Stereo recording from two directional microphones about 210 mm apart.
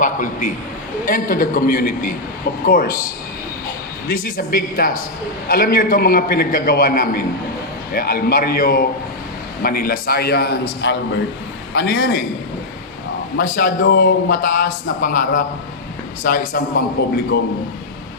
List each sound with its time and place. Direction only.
0.0 s a man's voice: 40° left (ahead or behind)
4.1 s speech: 45° left (ahead or behind)
13.3 s speech: 45° left (ahead or behind)